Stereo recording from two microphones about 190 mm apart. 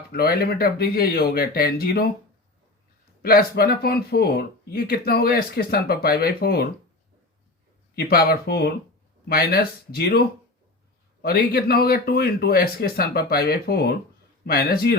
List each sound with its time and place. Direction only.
0.1 s a man's voice: 55° left (ahead or behind)
3.2 s speech: 55° left (ahead or behind)
7.9 s a man's voice: 55° left (ahead or behind)